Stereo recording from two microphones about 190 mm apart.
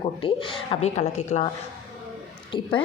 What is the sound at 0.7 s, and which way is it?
Speech, 35° left (ahead or behind).